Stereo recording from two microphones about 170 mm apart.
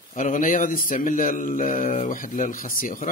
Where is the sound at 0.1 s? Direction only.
50° left (ahead or behind).